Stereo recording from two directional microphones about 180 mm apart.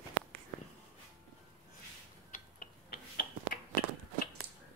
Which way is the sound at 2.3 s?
55° left (ahead or behind).